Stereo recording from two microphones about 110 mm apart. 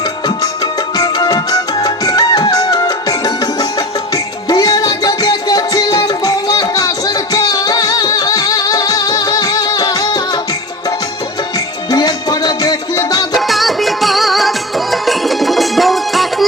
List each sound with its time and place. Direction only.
0.3 s music: 40° left (ahead or behind)
11.9 s music: 35° left (ahead or behind)
13.3 s music: centre (ahead or behind)